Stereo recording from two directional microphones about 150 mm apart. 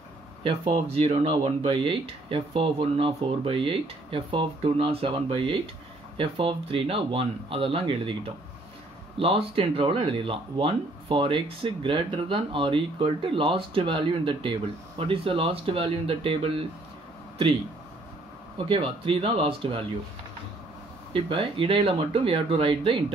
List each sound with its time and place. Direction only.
0.4 s speech: 35° right (ahead or behind)
18.6 s speech: 35° right (ahead or behind)
21.1 s speech: 35° right (ahead or behind)